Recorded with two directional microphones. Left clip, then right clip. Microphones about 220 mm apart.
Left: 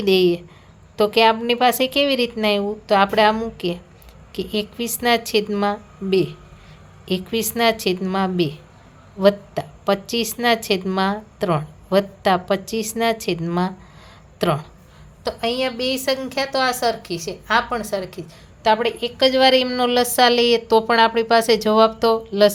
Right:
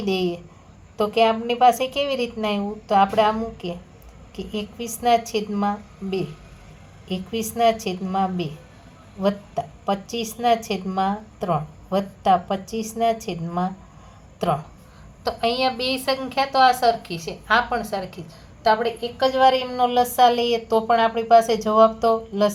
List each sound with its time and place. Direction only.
0.0 s a woman's voice: 30° left (ahead or behind)
15.2 s a woman's voice: 15° left (ahead or behind)
18.6 s a woman's voice: 30° left (ahead or behind)